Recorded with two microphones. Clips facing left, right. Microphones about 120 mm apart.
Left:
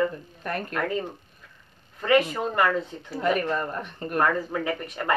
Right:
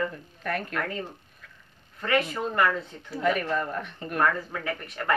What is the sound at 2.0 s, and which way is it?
Speech, 15° left (ahead or behind).